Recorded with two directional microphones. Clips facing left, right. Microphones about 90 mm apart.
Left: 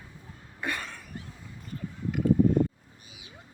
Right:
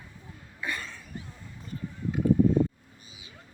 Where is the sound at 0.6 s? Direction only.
60° left (ahead or behind).